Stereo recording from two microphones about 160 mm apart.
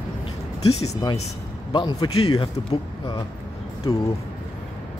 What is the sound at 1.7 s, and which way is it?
Speech, 25° left (ahead or behind).